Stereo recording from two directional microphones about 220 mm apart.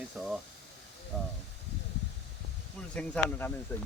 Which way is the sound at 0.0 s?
5° right (ahead or behind).